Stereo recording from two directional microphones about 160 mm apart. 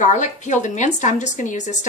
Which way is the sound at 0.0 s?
50° left (ahead or behind).